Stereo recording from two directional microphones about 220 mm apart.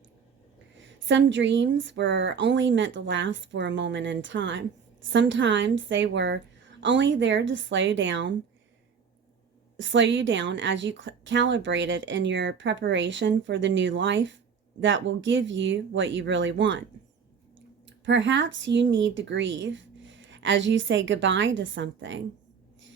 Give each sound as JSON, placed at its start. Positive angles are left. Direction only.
{"t": 0.8, "sound": "a woman's voice", "side_deg": -55}
{"t": 9.7, "sound": "a woman's voice", "side_deg": -55}
{"t": 17.8, "sound": "a woman's voice", "side_deg": -55}